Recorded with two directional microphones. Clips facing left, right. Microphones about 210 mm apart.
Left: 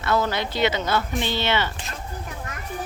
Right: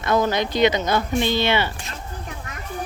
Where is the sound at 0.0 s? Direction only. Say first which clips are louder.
Right 3 dB; 15° right (ahead or behind).